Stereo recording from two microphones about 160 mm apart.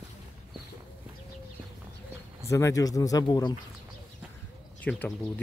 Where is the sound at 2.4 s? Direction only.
20° left (ahead or behind).